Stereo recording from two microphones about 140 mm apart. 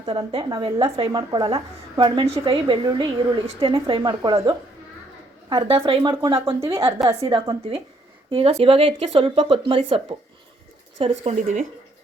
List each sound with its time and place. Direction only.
0.0 s a woman's voice: 40° right (ahead or behind)
5.5 s a woman's voice: 40° right (ahead or behind)
8.3 s a woman's voice: 45° right (ahead or behind)
11.2 s speech: 60° right (ahead or behind)